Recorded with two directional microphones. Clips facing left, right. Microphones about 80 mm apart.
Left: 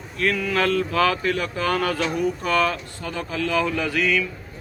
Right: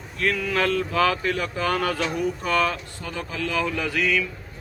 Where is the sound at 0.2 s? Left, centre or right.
Centre.